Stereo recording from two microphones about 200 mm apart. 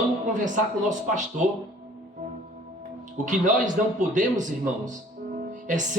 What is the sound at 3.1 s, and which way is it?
A man's voice, 40° right (ahead or behind).